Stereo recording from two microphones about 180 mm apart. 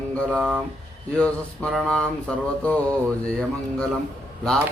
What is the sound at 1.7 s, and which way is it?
Mantra, 5° left (ahead or behind).